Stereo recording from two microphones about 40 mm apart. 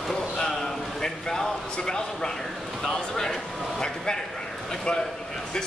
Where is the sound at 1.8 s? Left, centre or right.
Centre.